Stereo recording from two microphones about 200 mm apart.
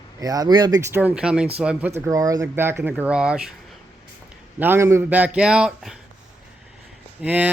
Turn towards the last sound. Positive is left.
turn(degrees=-5)  # may be behind; listen again after turning